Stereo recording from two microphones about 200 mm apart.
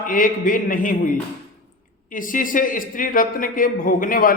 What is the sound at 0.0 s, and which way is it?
A man's voice, 45° left (ahead or behind).